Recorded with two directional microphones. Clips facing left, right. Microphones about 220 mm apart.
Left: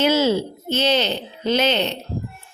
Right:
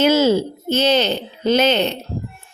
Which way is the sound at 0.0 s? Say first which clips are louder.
Right 3 dB; 45° right (ahead or behind).